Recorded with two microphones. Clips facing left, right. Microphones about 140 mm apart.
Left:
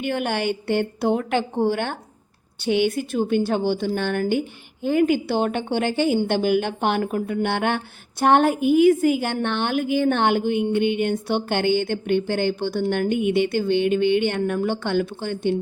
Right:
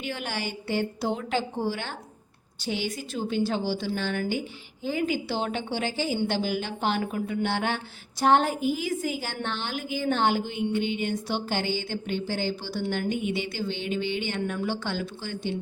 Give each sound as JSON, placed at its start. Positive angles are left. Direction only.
{"t": 0.0, "sound": "a woman's voice", "side_deg": 55}